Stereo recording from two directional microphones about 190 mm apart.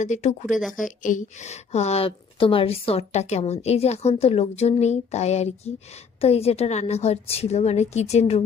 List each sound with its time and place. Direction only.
0.0 s a woman's voice: 40° left (ahead or behind)